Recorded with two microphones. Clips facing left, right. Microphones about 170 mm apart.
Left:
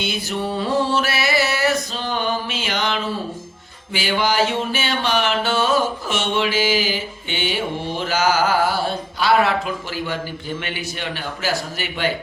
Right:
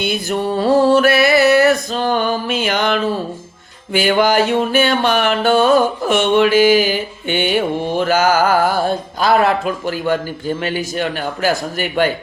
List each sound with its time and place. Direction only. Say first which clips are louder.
0.0 s music: right 5 dB; 50° right (ahead or behind)